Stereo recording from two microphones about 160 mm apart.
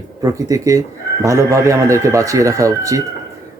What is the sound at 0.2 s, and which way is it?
Speech, 20° right (ahead or behind).